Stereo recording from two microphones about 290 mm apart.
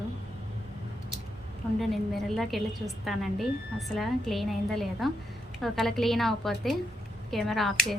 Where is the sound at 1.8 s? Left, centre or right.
Centre.